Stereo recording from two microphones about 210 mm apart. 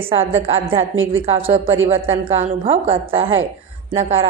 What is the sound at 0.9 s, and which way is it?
Speech, 70° right (ahead or behind).